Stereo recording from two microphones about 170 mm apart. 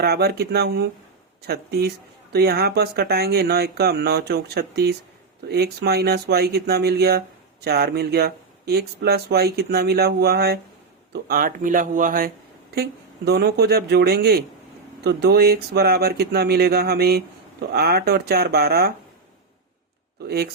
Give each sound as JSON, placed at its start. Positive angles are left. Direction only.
{"t": 0.0, "sound": "speech", "side_deg": -70}
{"t": 11.1, "sound": "speech", "side_deg": -60}
{"t": 12.7, "sound": "speech", "side_deg": -70}
{"t": 20.2, "sound": "speech", "side_deg": -65}